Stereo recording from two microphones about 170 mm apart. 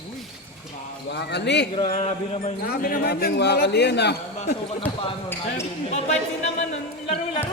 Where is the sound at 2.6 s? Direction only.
60° left (ahead or behind); by 4.1 s 85° left.